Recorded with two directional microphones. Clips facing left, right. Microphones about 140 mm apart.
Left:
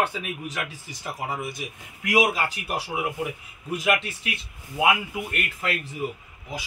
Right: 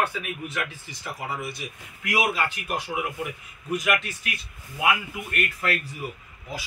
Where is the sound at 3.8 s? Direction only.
25° left (ahead or behind).